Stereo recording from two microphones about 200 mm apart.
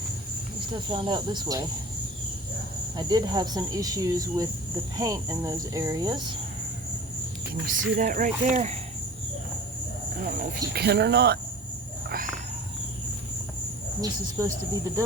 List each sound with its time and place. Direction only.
0.7 s speech: 25° right (ahead or behind)
3.0 s speech: 20° right (ahead or behind)
7.7 s speech: 45° right (ahead or behind)
10.2 s speech: 45° right (ahead or behind)
14.0 s speech: 15° right (ahead or behind)